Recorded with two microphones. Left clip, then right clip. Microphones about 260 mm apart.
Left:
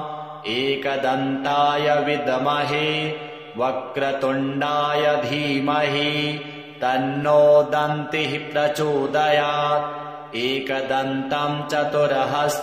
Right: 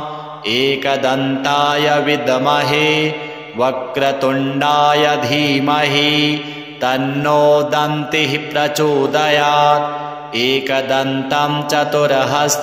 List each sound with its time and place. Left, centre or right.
0.5 s mantra: right